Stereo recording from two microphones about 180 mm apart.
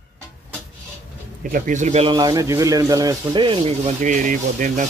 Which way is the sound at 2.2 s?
20° right (ahead or behind).